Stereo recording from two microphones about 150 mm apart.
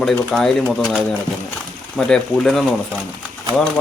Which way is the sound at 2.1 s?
Centre (ahead or behind).